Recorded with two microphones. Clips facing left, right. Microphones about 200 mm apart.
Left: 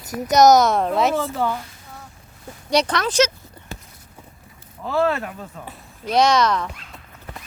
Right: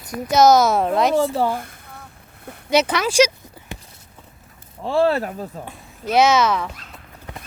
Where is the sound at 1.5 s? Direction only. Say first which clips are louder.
Right 2 dB; 55° right (ahead or behind).